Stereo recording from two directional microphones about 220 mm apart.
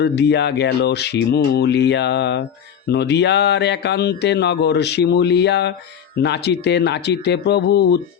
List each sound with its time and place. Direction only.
0.0 s speech: 50° left (ahead or behind)